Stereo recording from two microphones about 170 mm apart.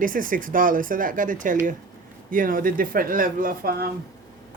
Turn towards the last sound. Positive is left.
turn(degrees=-60)  # may be behind; listen again after turning